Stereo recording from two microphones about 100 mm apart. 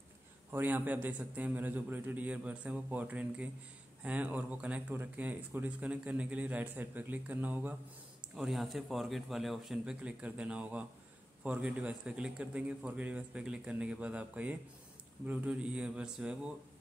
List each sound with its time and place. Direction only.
0.5 s speech: 20° right (ahead or behind)
8.4 s a man's voice: centre (ahead or behind)
10.0 s speech: 10° right (ahead or behind)